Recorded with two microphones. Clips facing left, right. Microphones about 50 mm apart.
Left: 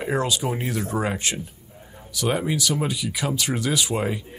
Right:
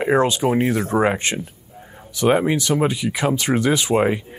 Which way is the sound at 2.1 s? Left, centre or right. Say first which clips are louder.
Right 7 dB; right.